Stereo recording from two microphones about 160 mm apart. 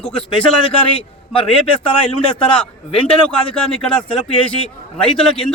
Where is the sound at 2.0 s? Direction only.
5° left (ahead or behind).